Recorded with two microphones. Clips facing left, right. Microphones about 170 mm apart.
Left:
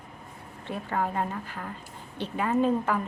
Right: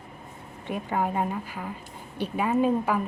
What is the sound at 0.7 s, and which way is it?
A woman's voice, 15° right (ahead or behind).